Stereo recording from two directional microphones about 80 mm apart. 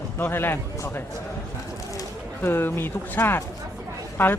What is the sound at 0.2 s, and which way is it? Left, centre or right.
Speech, left.